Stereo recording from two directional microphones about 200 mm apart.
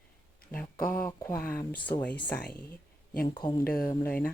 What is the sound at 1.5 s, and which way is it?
Speech, 10° left (ahead or behind).